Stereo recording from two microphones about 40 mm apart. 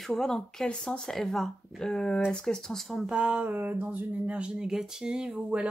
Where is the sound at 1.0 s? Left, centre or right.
Centre.